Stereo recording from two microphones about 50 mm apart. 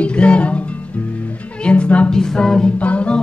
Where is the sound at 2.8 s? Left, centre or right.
Left.